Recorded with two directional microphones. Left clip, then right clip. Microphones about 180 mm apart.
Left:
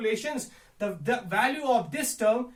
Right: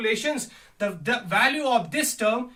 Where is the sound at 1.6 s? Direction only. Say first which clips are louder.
Right 3 dB; 25° right (ahead or behind).